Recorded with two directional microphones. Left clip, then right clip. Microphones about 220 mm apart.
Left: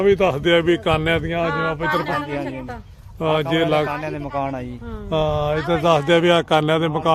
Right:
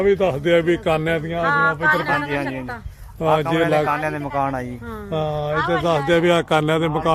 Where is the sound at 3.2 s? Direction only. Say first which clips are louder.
Right 1 dB; centre (ahead or behind).